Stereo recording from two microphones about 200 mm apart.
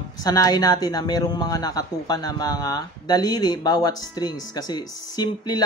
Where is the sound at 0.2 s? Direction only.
20° left (ahead or behind).